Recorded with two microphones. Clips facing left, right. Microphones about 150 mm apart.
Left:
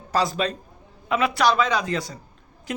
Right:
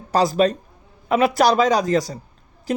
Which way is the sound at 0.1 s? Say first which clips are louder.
Right 6 dB; 35° right (ahead or behind).